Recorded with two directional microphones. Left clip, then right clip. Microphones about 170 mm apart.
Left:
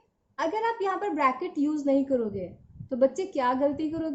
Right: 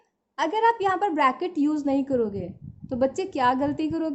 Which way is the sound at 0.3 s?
50° right (ahead or behind).